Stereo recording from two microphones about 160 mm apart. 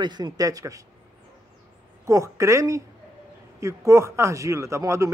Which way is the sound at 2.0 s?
20° right (ahead or behind).